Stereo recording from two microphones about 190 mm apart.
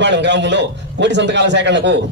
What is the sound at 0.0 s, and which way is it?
A man's voice, 65° right (ahead or behind).